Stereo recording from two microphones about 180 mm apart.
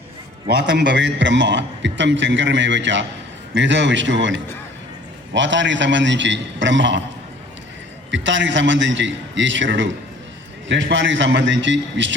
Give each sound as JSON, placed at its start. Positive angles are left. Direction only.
{"t": 0.4, "sound": "a man's voice", "side_deg": -75}
{"t": 8.1, "sound": "a man's voice", "side_deg": -90}